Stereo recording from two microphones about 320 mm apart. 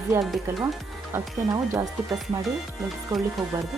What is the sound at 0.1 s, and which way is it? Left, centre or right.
Speech, centre.